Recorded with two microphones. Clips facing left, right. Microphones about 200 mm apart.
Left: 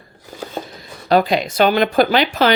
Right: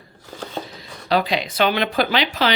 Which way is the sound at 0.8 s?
45° left (ahead or behind).